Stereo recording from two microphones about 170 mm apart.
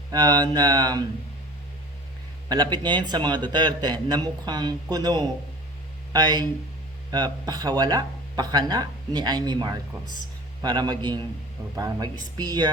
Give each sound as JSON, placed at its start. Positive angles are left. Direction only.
{"t": 0.1, "sound": "speech", "side_deg": -20}
{"t": 2.7, "sound": "speech", "side_deg": -25}